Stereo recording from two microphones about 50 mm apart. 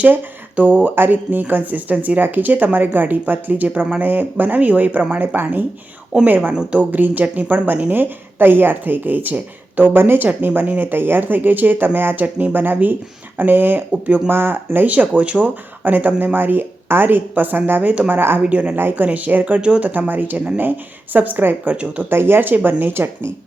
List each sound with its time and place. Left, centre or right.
0.0 s a woman's voice: right
6.5 s a woman's voice: centre
6.7 s a woman's voice: right
15.2 s speech: right
15.8 s a woman's voice: right
18.1 s speech: right
18.4 s speech: right
18.8 s speech: right
19.0 s a woman's voice: right
22.1 s speech: right